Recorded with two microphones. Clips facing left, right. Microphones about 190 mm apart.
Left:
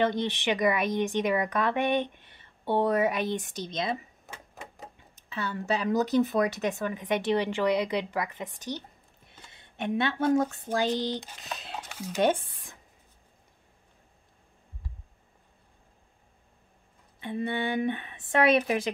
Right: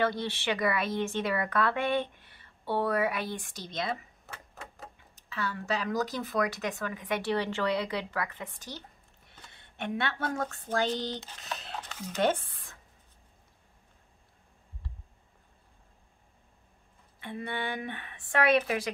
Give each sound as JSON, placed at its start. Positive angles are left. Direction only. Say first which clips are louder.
{"t": 0.0, "sound": "speech", "louder": "left 3 dB", "side_deg": 20}
{"t": 17.2, "sound": "speech", "louder": "left 5 dB", "side_deg": 20}